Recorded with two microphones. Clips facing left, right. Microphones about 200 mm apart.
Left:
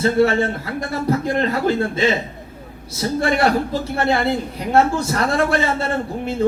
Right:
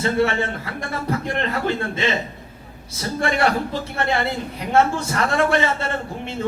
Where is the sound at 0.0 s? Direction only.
35° left (ahead or behind).